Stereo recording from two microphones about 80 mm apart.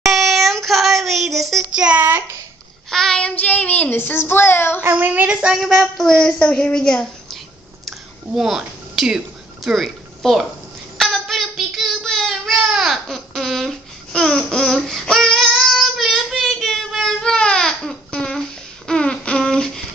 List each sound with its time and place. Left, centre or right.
0.0 s child singing: centre
1.7 s child singing: centre
2.0 s a child's voice: right
2.9 s child singing: centre; by 4.8 s left
4.8 s speech: right
5.6 s speech: centre
6.0 s a child's voice: centre
8.3 s speech: centre
11.0 s child singing: centre
18.9 s a sound: centre